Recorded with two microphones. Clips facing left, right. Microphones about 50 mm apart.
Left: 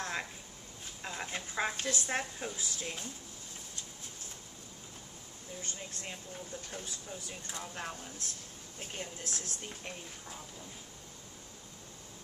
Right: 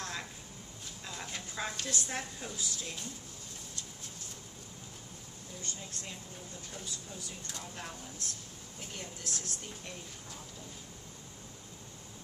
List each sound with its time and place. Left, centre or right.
0.0 s a sound: left
2.0 s speech: left
5.6 s speech: left
7.3 s speech: left